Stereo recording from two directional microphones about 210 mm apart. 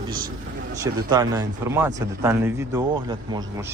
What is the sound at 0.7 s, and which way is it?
Speech, 15° right (ahead or behind).